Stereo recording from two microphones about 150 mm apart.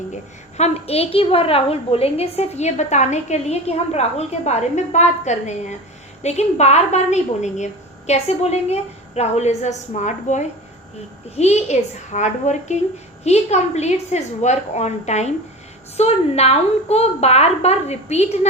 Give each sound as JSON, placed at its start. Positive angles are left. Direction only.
{"t": 0.1, "sound": "a woman's voice", "side_deg": 45}